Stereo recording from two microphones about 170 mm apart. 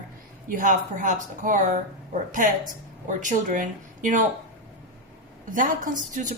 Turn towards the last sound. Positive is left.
turn(degrees=-50)  # may be behind; listen again after turning